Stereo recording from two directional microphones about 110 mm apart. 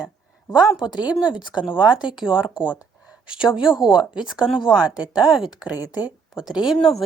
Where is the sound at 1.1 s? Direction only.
5° right (ahead or behind).